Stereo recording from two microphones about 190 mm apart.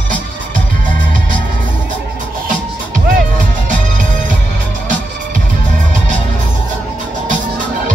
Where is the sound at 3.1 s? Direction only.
45° right (ahead or behind).